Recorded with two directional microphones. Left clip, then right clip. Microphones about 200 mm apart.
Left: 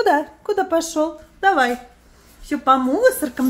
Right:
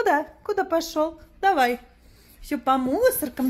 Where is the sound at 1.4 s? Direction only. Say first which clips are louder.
Left 4 dB; 15° right (ahead or behind).